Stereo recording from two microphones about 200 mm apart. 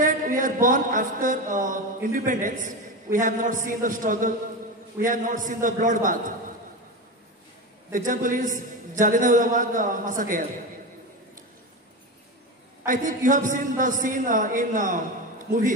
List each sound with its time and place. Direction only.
0.0 s a man's voice: 40° right (ahead or behind)
7.9 s a man's voice: 40° right (ahead or behind)
12.8 s a man's voice: 40° right (ahead or behind)